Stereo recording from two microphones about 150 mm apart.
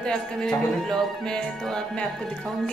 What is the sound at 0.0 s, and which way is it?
A woman's voice, 5° left (ahead or behind).